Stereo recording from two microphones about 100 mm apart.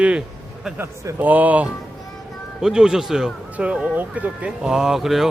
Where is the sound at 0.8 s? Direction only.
20° right (ahead or behind).